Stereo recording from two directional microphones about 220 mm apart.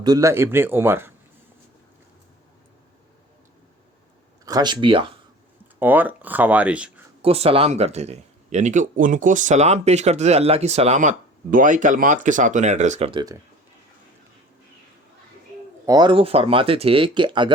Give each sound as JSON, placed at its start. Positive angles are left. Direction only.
{"t": 0.0, "sound": "speech", "side_deg": -15}
{"t": 4.4, "sound": "speech", "side_deg": -20}
{"t": 5.8, "sound": "speech", "side_deg": -10}
{"t": 7.2, "sound": "speech", "side_deg": -25}
{"t": 15.9, "sound": "speech", "side_deg": -20}